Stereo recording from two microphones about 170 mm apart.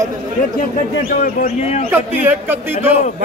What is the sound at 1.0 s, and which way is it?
Speech, 55° left (ahead or behind).